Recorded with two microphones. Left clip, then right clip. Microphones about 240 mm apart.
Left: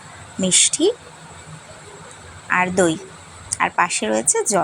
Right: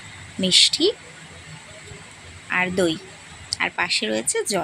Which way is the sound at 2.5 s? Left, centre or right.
Centre.